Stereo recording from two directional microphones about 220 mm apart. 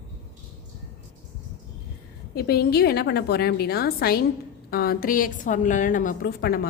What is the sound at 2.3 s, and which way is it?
A woman's voice, 45° left (ahead or behind).